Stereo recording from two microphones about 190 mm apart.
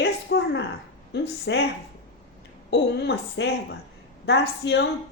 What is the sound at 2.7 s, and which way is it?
A woman's voice, 65° left (ahead or behind).